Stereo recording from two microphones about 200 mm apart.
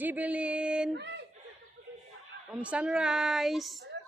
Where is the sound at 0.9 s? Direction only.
60° right (ahead or behind).